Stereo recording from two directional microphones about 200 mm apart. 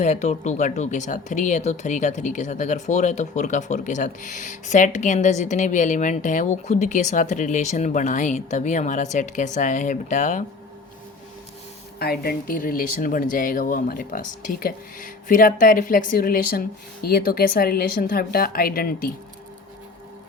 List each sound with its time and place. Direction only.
0.0 s speech: 35° left (ahead or behind)
11.9 s speech: 50° left (ahead or behind)